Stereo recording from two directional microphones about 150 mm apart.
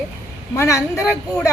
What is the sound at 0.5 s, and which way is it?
Speech, 20° left (ahead or behind).